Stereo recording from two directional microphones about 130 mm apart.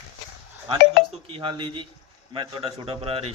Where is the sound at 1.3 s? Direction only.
40° right (ahead or behind).